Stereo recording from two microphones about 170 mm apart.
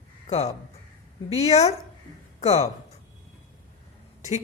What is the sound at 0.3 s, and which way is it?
A woman's voice, 40° left (ahead or behind).